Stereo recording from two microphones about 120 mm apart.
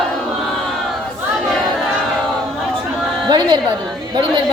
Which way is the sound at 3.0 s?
Centre (ahead or behind).